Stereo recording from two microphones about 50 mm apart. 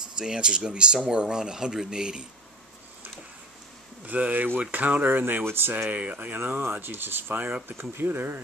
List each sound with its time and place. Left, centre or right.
0.2 s speech: centre
4.0 s speech: right
5.4 s speech: right
5.9 s speech: right
7.3 s speech: right
8.0 s speech: right